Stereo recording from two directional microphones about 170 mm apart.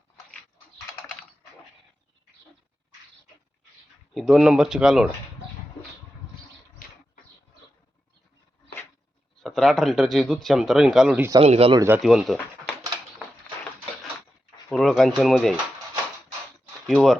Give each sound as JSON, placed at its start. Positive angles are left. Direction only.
{"t": 4.1, "sound": "speech", "side_deg": 0}
{"t": 6.8, "sound": "a sound", "side_deg": 55}
{"t": 9.4, "sound": "speech", "side_deg": 0}
{"t": 11.3, "sound": "speech", "side_deg": -35}
{"t": 11.7, "sound": "speech", "side_deg": -20}
{"t": 12.0, "sound": "speech", "side_deg": 0}
{"t": 14.7, "sound": "speech", "side_deg": 5}
{"t": 16.8, "sound": "speech", "side_deg": 0}